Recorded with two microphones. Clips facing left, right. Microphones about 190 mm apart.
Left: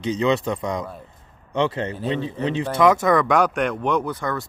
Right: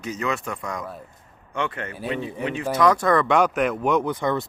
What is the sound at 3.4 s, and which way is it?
Speech, 5° right (ahead or behind).